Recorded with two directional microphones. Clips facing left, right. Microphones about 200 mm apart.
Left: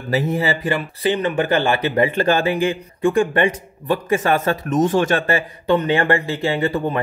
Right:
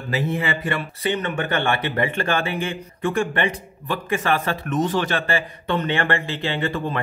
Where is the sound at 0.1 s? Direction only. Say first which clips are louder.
Left 4 dB; 40° left (ahead or behind).